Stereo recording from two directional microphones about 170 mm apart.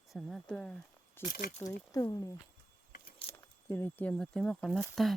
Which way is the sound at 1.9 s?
20° left (ahead or behind).